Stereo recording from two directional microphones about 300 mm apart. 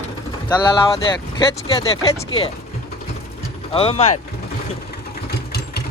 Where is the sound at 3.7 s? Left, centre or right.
Centre.